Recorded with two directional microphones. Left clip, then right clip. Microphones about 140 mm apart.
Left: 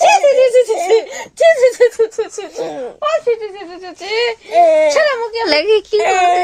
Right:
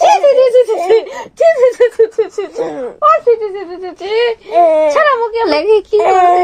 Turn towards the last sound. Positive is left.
turn(degrees=-5)  # may be behind; listen again after turning